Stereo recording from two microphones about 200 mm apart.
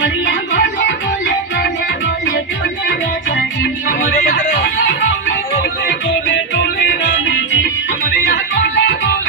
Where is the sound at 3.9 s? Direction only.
40° left (ahead or behind).